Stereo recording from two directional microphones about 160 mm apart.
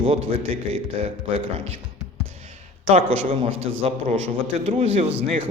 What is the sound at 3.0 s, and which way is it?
Speech, 35° right (ahead or behind).